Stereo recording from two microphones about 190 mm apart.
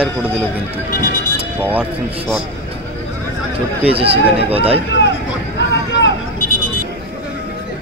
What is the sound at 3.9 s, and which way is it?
Speech, 30° right (ahead or behind).